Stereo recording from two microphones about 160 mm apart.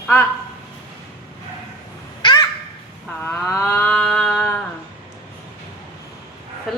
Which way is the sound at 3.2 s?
10° left (ahead or behind).